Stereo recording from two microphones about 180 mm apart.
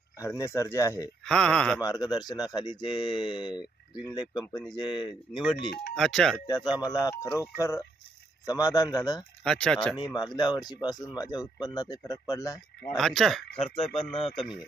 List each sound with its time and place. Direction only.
0.2 s speech: 15° left (ahead or behind)
1.2 s speech: 5° left (ahead or behind)
1.8 s speech: 20° left (ahead or behind)
5.9 s speech: 5° left (ahead or behind)
6.5 s speech: 20° left (ahead or behind)
9.4 s speech: 5° left (ahead or behind)
10.2 s speech: 25° left (ahead or behind)
13.0 s speech: centre (ahead or behind)
13.6 s speech: 30° left (ahead or behind)